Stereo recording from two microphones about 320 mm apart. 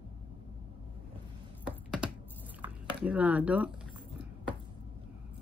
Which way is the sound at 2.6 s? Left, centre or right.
Centre.